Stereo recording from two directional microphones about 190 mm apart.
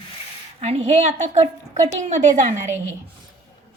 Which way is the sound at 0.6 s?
35° right (ahead or behind).